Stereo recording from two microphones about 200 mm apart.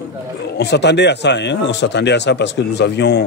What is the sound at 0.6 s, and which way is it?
Speech, 60° left (ahead or behind).